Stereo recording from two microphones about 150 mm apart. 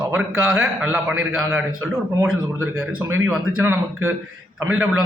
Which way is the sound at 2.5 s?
15° right (ahead or behind).